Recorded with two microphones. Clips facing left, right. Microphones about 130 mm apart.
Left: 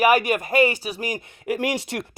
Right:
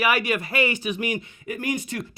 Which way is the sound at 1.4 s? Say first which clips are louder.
Left 5 dB; 85° left.